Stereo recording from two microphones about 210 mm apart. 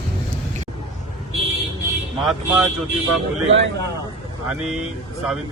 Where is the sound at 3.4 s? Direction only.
60° right (ahead or behind).